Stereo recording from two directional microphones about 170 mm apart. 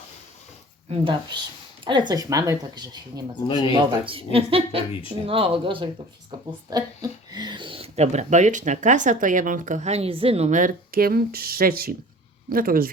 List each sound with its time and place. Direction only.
0.9 s speech: 30° right (ahead or behind); by 12.9 s 60° right (ahead or behind)